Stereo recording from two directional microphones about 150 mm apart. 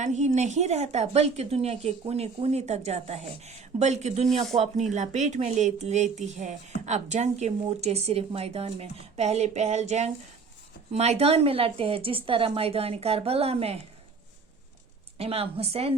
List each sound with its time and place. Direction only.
0.0 s a woman's voice: 50° right (ahead or behind)
15.2 s speech: 40° right (ahead or behind)